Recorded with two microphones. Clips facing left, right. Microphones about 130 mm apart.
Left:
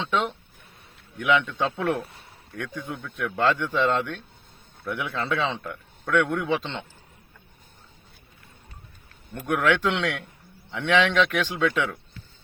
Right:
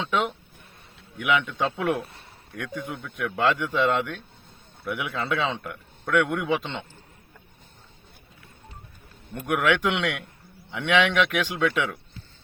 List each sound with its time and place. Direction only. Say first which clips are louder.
0.0 s speech: even; 5° right (ahead or behind)
9.3 s speech: even; 15° right (ahead or behind)